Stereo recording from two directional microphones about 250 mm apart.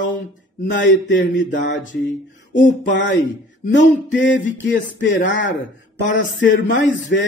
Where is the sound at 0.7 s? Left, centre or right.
Left.